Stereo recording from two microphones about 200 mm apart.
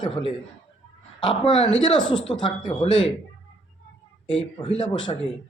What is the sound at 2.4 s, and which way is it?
Speech, 5° left (ahead or behind).